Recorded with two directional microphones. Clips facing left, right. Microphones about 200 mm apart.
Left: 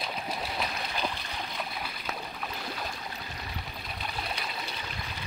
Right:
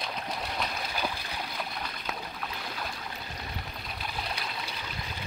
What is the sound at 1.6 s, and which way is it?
Stream, 5° left (ahead or behind).